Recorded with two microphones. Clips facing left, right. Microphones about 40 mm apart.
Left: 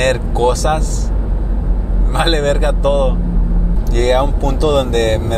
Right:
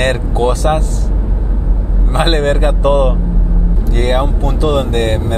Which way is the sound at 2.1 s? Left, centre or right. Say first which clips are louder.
Right 1 dB; right.